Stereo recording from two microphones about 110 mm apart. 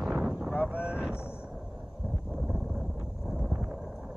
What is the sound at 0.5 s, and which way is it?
Vehicle, 15° left (ahead or behind).